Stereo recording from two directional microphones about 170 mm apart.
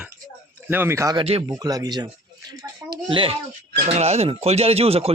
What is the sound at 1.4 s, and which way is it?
Speech, 20° right (ahead or behind).